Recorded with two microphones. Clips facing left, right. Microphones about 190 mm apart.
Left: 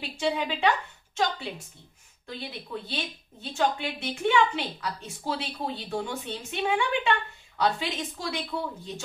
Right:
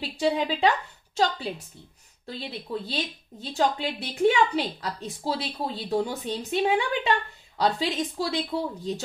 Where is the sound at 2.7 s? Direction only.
30° right (ahead or behind).